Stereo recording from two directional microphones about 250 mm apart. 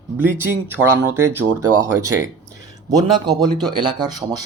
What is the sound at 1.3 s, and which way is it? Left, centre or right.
Speech, centre.